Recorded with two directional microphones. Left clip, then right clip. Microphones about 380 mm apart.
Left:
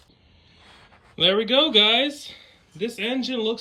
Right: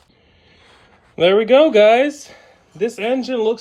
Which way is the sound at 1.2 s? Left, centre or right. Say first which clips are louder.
Right 8 dB; centre.